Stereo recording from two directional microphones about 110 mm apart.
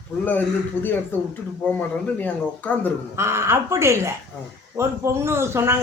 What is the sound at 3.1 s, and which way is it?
A man's voice, 25° right (ahead or behind).